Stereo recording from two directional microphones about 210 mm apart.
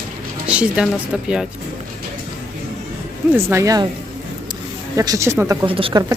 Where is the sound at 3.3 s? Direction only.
15° right (ahead or behind).